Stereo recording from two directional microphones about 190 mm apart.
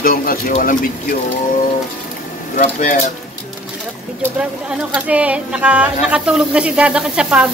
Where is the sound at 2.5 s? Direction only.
40° left (ahead or behind).